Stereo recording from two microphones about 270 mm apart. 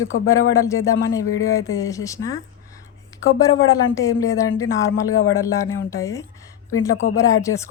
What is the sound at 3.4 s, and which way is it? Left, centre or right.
Speech, centre.